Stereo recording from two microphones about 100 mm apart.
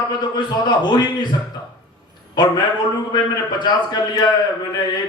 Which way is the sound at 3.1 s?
45° left (ahead or behind).